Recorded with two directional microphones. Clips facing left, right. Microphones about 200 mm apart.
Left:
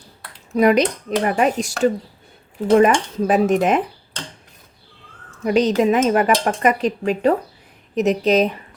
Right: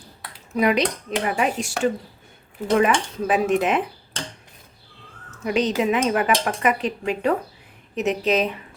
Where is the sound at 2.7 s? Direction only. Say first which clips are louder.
Left 5 dB; 40° left (ahead or behind).